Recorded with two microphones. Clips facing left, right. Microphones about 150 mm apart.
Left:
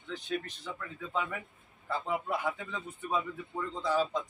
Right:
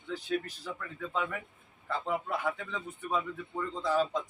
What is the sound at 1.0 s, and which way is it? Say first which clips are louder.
Speech: right 1 dB; 10° left (ahead or behind).